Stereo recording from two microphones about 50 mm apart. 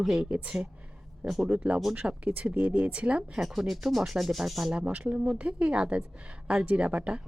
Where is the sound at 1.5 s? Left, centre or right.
Right.